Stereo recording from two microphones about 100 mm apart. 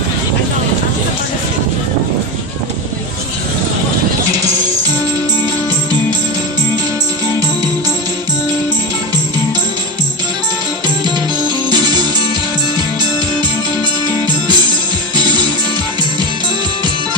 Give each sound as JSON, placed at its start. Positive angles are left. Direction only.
{"t": 10.8, "sound": "music", "side_deg": -45}